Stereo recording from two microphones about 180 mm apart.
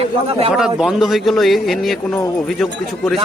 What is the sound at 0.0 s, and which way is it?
Speech, 30° right (ahead or behind).